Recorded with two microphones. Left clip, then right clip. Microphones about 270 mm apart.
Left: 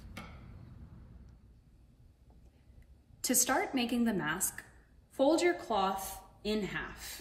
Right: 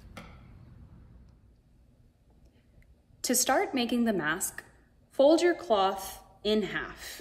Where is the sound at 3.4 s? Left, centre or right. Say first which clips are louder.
Right 7 dB; centre.